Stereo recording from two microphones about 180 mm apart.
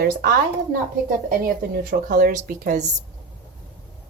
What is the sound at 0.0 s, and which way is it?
Speech, 55° right (ahead or behind).